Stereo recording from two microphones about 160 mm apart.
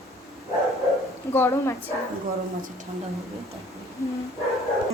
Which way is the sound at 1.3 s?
20° left (ahead or behind).